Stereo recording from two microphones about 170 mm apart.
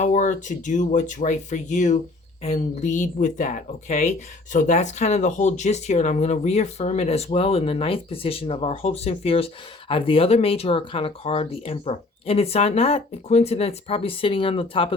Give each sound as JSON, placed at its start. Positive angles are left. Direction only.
{"t": 0.0, "sound": "speech", "side_deg": 45}